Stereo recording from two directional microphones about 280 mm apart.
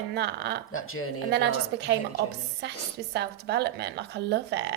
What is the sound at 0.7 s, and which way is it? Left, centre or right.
Speech, left.